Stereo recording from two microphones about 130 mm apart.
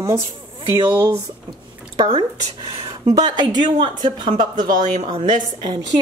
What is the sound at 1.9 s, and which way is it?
Speech, 35° right (ahead or behind).